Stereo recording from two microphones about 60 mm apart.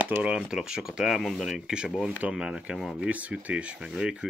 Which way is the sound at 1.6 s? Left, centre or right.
Centre.